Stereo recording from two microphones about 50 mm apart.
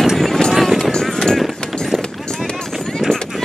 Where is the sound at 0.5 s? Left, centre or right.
Centre.